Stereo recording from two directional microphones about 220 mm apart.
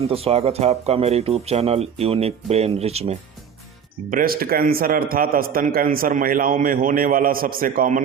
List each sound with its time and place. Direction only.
0.1 s speech: 25° right (ahead or behind)
4.1 s a man's voice: 40° right (ahead or behind)